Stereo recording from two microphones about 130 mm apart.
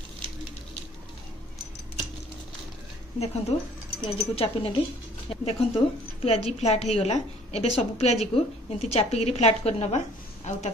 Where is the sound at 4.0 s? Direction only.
40° left (ahead or behind).